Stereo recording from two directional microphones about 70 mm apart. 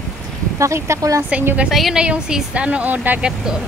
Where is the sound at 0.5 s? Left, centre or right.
Right.